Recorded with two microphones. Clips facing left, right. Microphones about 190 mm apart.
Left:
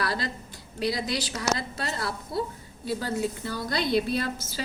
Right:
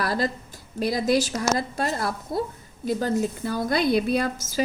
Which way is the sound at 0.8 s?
50° right (ahead or behind).